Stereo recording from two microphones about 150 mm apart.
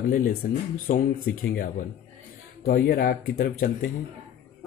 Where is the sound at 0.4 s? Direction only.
65° left (ahead or behind).